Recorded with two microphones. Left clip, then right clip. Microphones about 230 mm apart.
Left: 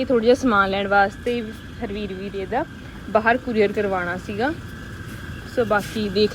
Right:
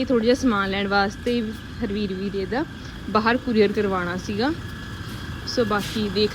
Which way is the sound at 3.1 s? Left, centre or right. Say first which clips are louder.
Left 2 dB; centre.